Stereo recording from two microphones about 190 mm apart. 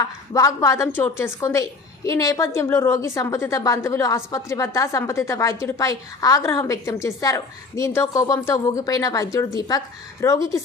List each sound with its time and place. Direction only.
0.3 s a woman's voice: 15° left (ahead or behind)